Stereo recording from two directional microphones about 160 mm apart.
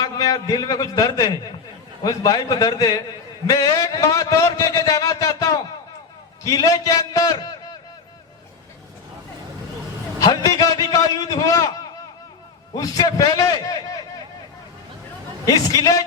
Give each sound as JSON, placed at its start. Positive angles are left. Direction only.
{"t": 0.0, "sound": "a man's voice", "side_deg": 25}
{"t": 10.2, "sound": "a man's voice", "side_deg": 20}
{"t": 15.4, "sound": "a man's voice", "side_deg": 25}